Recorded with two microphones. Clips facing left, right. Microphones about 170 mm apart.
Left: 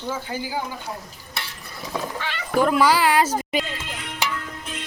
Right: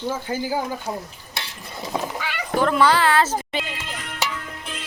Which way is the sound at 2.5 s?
10° left (ahead or behind).